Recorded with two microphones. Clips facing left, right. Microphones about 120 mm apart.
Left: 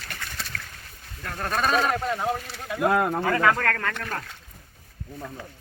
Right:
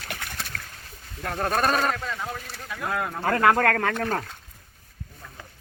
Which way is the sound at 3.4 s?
55° right (ahead or behind).